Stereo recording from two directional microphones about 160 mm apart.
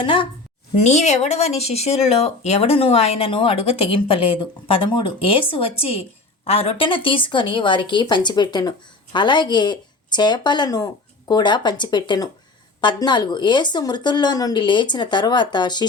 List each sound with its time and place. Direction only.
0.0 s speech: 30° left (ahead or behind)
0.8 s speech: 45° left (ahead or behind); by 15.9 s 30° left (ahead or behind)